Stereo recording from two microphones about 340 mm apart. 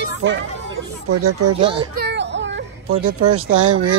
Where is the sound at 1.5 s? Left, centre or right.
Centre.